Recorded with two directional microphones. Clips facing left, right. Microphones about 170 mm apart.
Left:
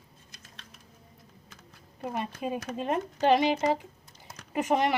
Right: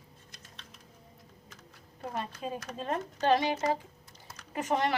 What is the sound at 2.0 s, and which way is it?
Speech, 15° left (ahead or behind).